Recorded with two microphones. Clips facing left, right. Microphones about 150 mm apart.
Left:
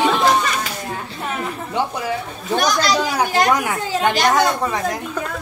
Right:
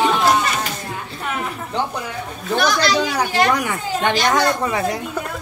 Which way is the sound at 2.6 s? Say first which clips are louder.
Right 1 dB; 45° left (ahead or behind).